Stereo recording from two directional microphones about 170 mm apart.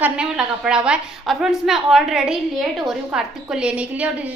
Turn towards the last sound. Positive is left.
turn(degrees=-10)  # may be behind; listen again after turning